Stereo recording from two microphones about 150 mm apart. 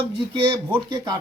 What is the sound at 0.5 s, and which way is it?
Speech, 25° right (ahead or behind).